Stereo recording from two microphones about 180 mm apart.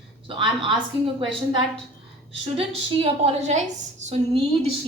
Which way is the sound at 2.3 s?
30° right (ahead or behind).